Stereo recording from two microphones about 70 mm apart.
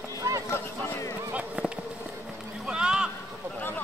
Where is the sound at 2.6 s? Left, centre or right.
Centre.